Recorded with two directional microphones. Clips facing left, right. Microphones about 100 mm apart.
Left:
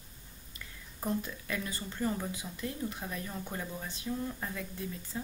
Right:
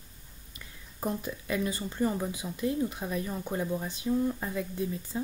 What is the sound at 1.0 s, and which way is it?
Speech, 20° right (ahead or behind).